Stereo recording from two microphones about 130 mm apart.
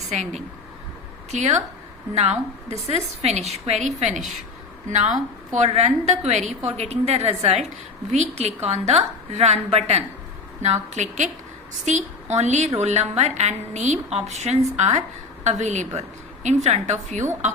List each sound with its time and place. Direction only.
0.1 s a woman's voice: 60° right (ahead or behind)
2.6 s a woman's voice: 55° right (ahead or behind)
10.9 s a woman's voice: 70° right (ahead or behind)